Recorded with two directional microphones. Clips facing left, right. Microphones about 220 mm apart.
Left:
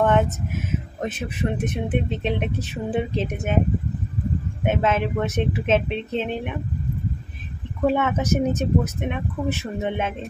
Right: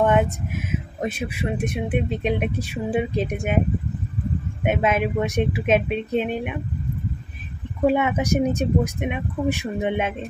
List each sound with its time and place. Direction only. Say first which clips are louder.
0.0 s a sound: right 1 dB; 15° right (ahead or behind)
1.0 s speech: even; 10° right (ahead or behind)
4.6 s speech: right 1 dB; 15° right (ahead or behind)
7.8 s speech: right 1 dB; 10° right (ahead or behind)